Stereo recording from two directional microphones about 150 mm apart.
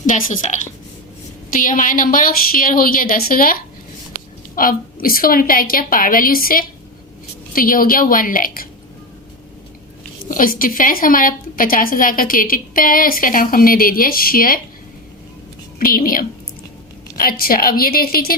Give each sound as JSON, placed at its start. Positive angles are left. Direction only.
{"t": 0.0, "sound": "a woman's voice", "side_deg": 60}
{"t": 10.2, "sound": "a woman's voice", "side_deg": 70}
{"t": 15.8, "sound": "a woman's voice", "side_deg": 70}